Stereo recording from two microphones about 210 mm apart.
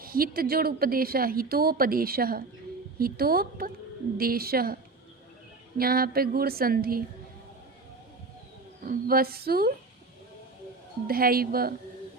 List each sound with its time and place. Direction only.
0.0 s a woman's voice: 45° right (ahead or behind)
8.9 s a woman's voice: 45° right (ahead or behind)
11.0 s a woman's voice: 45° right (ahead or behind)